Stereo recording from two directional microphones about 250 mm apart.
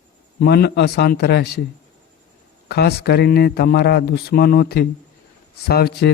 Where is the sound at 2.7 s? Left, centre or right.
Left.